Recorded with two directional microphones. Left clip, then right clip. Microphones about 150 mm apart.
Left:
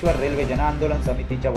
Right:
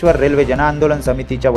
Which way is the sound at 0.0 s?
45° right (ahead or behind).